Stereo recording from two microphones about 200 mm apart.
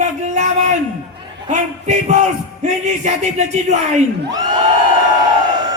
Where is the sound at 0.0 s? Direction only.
35° right (ahead or behind).